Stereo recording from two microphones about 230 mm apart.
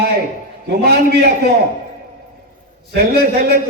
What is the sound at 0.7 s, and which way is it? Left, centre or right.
Speech, right.